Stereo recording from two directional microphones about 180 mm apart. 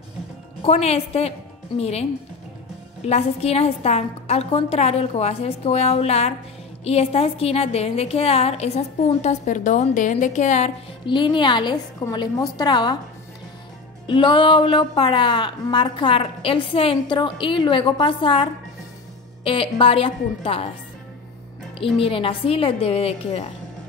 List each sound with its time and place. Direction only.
0.6 s a woman's voice: 35° left (ahead or behind)
11.1 s a woman's voice: 25° left (ahead or behind)
14.0 s a woman's voice: 25° left (ahead or behind)
21.9 s a woman's voice: 30° left (ahead or behind)